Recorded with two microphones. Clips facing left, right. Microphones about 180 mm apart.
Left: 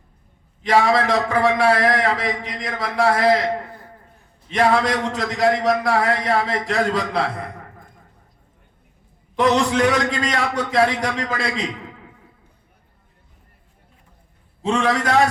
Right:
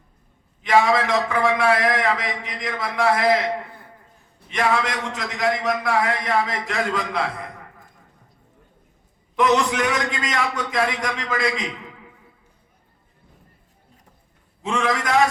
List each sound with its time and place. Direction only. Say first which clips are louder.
0.6 s a man's voice: left 1 dB; 35° left (ahead or behind)
4.5 s a man's voice: left 4 dB; 35° left (ahead or behind)
9.3 s a man's voice: left 2 dB; 35° left (ahead or behind)
14.6 s a man's voice: left 3 dB; 35° left (ahead or behind)